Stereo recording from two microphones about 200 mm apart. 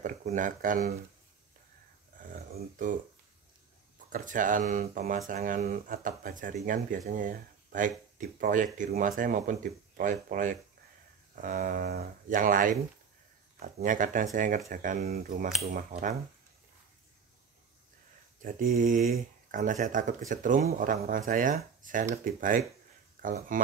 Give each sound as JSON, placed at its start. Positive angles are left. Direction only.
{"t": 0.0, "sound": "speech", "side_deg": -40}
{"t": 2.1, "sound": "a sound", "side_deg": -45}
{"t": 4.1, "sound": "speech", "side_deg": -40}
{"t": 18.4, "sound": "speech", "side_deg": -45}